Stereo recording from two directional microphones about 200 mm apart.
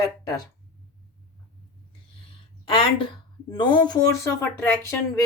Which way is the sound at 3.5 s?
20° left (ahead or behind).